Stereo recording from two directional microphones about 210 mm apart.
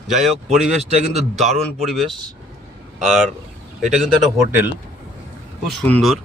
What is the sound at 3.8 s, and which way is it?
Speech, centre (ahead or behind).